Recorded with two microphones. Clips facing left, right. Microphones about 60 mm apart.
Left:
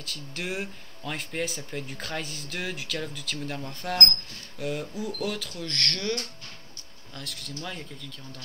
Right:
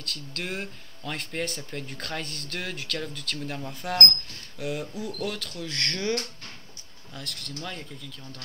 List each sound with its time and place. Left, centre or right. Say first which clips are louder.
0.0 s speech: even; centre
5.7 s speech: right 1 dB; centre
7.2 s speech: even; centre